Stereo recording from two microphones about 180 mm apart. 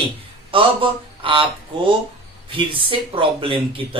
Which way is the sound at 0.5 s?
30° right (ahead or behind).